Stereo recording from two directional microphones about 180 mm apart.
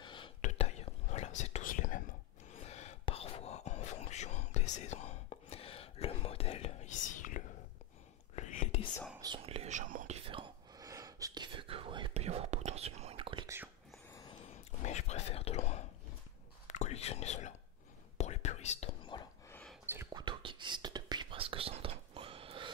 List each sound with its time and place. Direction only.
0.0 s whispering: 25° left (ahead or behind)
0.4 s whispering: 35° left (ahead or behind)
2.5 s whispering: 35° left (ahead or behind)
9.2 s whispering: 30° right (ahead or behind)
14.8 s whispering: 40° left (ahead or behind)
19.9 s whispering: 15° right (ahead or behind)
20.2 s whispering: 25° right (ahead or behind)